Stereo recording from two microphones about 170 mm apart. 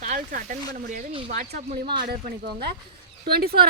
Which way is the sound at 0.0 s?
50° right (ahead or behind).